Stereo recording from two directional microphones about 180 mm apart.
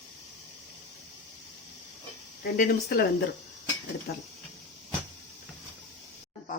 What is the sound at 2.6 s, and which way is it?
Speech, 55° left (ahead or behind).